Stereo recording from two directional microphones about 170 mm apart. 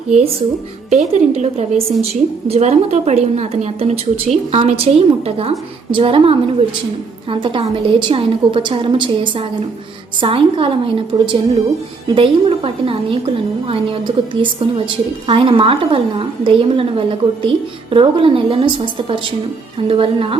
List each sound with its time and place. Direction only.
0.9 s a woman's voice: 40° right (ahead or behind)